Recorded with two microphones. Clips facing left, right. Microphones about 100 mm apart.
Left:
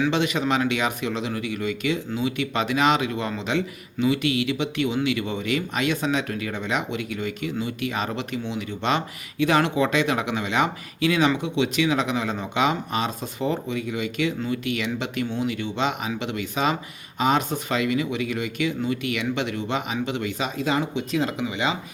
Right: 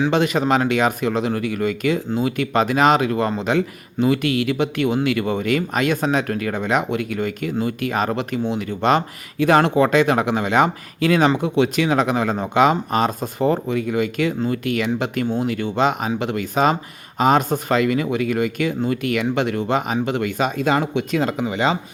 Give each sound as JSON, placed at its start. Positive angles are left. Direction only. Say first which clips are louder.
{"t": 0.1, "sound": "speech", "louder": "right 5 dB", "side_deg": -45}